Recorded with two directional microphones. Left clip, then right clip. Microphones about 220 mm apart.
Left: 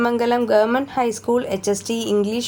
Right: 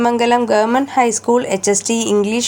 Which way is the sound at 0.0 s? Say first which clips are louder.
Right 5 dB; 15° right (ahead or behind).